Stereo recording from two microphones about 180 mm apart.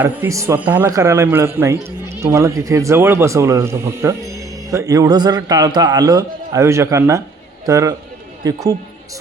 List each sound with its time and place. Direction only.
0.0 s a man's voice: 15° right (ahead or behind)